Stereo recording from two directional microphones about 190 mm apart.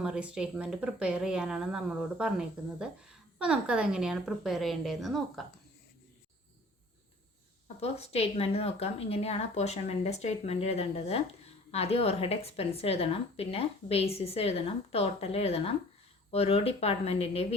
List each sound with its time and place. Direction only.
0.0 s speech: 5° right (ahead or behind)
7.8 s a woman's voice: 35° left (ahead or behind)